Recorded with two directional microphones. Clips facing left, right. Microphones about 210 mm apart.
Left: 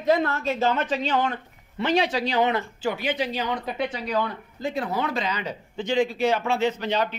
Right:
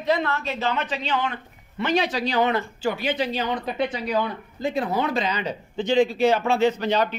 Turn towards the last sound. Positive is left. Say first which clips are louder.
# right 3 dB
turn(degrees=-40)  # may be behind; listen again after turning